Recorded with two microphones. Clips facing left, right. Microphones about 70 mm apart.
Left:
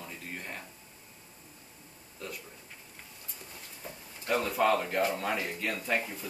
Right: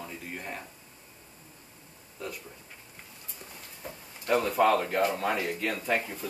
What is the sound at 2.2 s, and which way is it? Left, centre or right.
Speech, centre.